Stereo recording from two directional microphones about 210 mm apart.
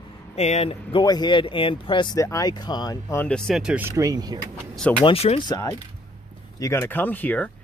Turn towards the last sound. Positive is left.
turn(degrees=5)  # may be behind; listen again after turning